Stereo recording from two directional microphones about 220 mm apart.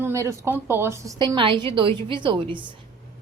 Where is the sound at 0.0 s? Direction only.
15° right (ahead or behind).